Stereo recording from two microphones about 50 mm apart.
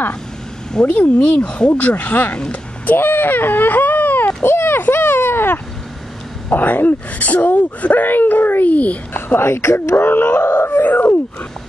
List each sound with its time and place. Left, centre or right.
0.8 s speech: left
4.5 s a child's voice: left
4.9 s a sound: left
6.5 s speech: left
9.4 s speech: left
9.9 s groan: left